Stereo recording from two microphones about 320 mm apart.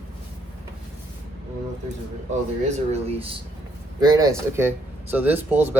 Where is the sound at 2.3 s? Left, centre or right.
Right.